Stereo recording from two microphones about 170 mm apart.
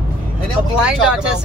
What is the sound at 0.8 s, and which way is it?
Speech, 5° right (ahead or behind).